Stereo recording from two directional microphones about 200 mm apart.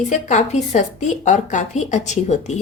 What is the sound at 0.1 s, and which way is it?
A woman's voice, 35° left (ahead or behind).